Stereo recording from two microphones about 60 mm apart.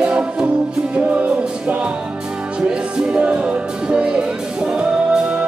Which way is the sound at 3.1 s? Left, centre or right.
Right.